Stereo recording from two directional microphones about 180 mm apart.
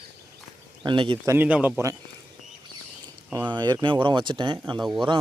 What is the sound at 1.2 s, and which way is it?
Speech, 15° right (ahead or behind).